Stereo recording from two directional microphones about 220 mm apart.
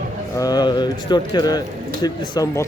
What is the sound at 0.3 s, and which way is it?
Speech, 15° left (ahead or behind).